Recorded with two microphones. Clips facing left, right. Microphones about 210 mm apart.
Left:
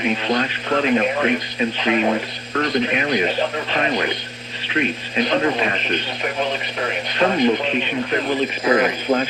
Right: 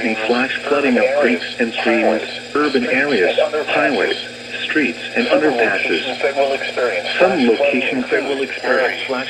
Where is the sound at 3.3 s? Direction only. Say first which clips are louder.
Right 7 dB; 35° right (ahead or behind).